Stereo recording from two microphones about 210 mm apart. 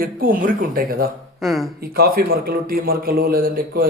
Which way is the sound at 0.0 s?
45° right (ahead or behind).